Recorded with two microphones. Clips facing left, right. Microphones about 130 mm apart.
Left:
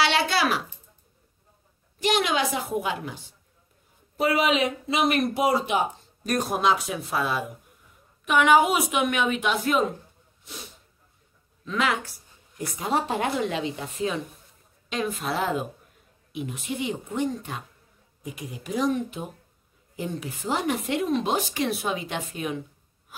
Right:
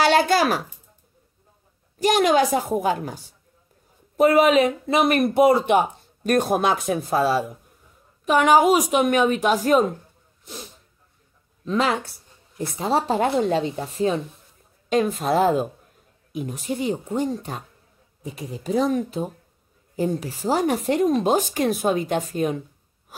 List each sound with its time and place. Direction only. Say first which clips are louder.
0.0 s speech: right 6 dB; 45° right (ahead or behind)
2.0 s speech: right 6 dB; 45° right (ahead or behind)
4.2 s a woman's voice: right 7 dB; 45° right (ahead or behind)
11.6 s a woman's voice: right 4 dB; 35° right (ahead or behind)